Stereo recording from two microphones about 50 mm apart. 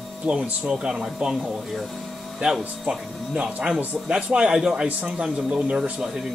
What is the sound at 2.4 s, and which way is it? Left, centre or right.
Speech, right.